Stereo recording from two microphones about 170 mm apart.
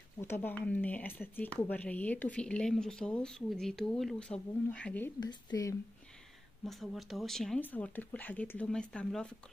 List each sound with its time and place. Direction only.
0.2 s speech: 15° left (ahead or behind)
5.2 s speech: 25° left (ahead or behind)
6.6 s speech: centre (ahead or behind)